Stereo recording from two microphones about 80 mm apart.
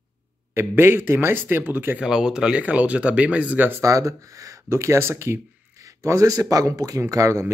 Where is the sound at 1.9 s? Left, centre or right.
Centre.